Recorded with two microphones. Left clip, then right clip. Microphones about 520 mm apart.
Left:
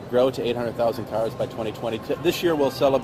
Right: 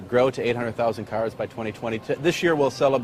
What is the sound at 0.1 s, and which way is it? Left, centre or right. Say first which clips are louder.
Speech: even; right.